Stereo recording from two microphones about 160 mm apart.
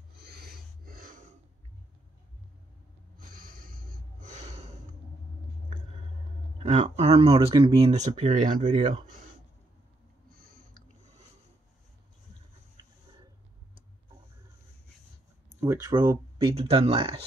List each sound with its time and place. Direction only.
0.2 s filing: 75° right (ahead or behind); by 1.3 s 55° right (ahead or behind)
3.2 s snort: 60° right (ahead or behind); by 4.7 s 45° right (ahead or behind)
6.6 s speech: 45° right (ahead or behind)
15.6 s speech: 20° right (ahead or behind)